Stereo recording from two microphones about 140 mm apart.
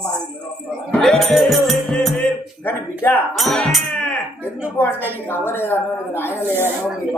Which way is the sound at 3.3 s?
5° left (ahead or behind).